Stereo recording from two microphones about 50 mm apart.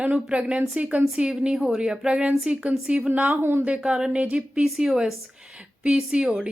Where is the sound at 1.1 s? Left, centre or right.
Centre.